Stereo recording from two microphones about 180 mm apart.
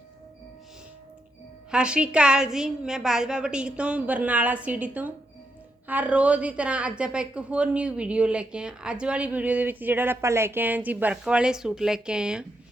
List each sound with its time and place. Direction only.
1.7 s a woman's voice: 5° right (ahead or behind)